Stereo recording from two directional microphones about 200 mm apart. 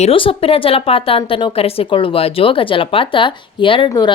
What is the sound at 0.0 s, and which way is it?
A woman's voice, 25° left (ahead or behind).